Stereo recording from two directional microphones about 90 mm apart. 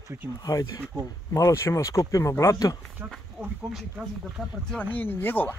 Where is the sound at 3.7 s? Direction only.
5° right (ahead or behind).